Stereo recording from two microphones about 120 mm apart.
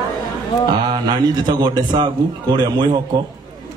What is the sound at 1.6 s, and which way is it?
A man's voice, 40° right (ahead or behind).